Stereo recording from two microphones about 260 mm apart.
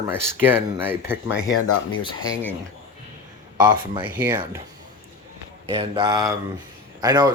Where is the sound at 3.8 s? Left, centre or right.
Centre.